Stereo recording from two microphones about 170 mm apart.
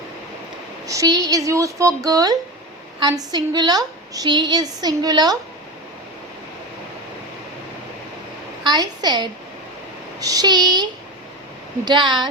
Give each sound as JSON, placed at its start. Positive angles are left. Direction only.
{"t": 0.9, "sound": "a woman's voice", "side_deg": -20}
{"t": 8.6, "sound": "a woman's voice", "side_deg": -25}
{"t": 11.9, "sound": "a woman's voice", "side_deg": -25}